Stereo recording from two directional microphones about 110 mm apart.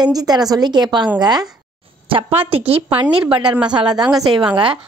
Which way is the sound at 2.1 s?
55° right (ahead or behind).